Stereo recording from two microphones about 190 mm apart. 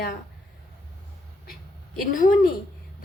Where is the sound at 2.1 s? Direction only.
45° left (ahead or behind).